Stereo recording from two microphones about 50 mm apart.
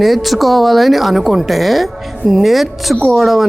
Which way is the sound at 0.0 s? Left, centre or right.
Centre.